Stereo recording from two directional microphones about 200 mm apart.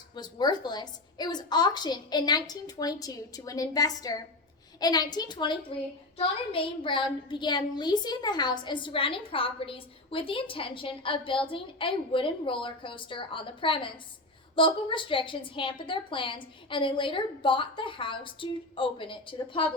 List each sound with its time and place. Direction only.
0.2 s a child's voice: 20° left (ahead or behind)